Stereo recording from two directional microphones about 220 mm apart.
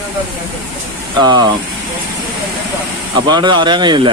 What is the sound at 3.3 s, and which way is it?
Speech, 20° right (ahead or behind).